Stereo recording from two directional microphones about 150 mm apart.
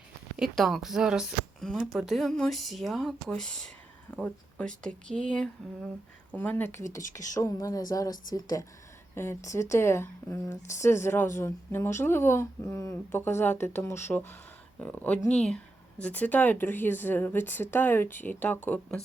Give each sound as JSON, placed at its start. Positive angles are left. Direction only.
{"t": 0.3, "sound": "speech", "side_deg": 0}